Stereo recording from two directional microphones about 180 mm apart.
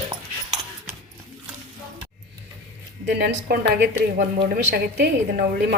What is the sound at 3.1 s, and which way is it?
A woman's voice, 65° right (ahead or behind).